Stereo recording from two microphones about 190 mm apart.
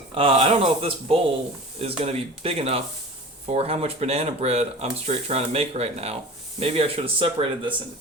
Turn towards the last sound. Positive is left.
turn(degrees=-30)  # may be behind; listen again after turning